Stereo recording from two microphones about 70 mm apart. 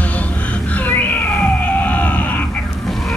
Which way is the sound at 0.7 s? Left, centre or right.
Left.